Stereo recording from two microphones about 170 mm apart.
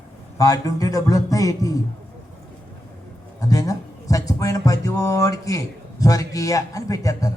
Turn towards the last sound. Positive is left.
turn(degrees=20)  # may be behind; listen again after turning